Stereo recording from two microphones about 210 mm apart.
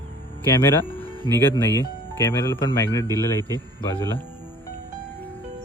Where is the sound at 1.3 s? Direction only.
10° left (ahead or behind).